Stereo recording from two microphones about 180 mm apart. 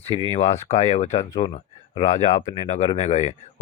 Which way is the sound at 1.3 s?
25° left (ahead or behind).